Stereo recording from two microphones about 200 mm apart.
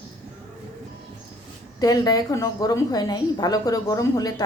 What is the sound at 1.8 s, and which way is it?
A woman's voice, 20° left (ahead or behind).